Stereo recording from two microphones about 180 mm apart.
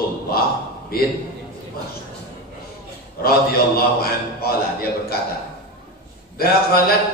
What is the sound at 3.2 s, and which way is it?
A man's voice, 60° left (ahead or behind).